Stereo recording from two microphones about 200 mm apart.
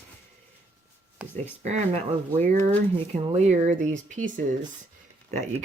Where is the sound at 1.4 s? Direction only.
35° right (ahead or behind).